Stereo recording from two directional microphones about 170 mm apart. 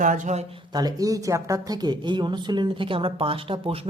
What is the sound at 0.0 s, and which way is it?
Speech, 50° right (ahead or behind).